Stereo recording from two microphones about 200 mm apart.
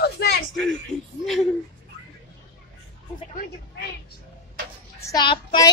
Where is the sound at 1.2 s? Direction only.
Centre (ahead or behind).